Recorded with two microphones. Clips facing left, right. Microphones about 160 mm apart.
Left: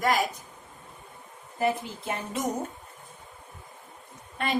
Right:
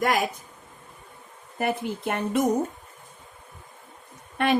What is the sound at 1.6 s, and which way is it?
Speech, 60° right (ahead or behind).